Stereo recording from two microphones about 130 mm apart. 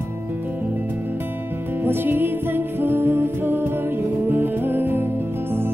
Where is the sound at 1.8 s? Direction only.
15° right (ahead or behind).